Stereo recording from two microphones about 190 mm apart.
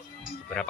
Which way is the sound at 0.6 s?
5° left (ahead or behind).